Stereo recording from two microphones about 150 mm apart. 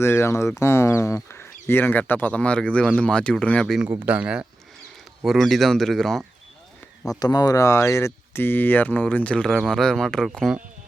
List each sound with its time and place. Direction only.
0.0 s speech: 15° left (ahead or behind)
4.0 s speech: 10° right (ahead or behind)
7.2 s speech: 25° left (ahead or behind); by 10.6 s centre (ahead or behind)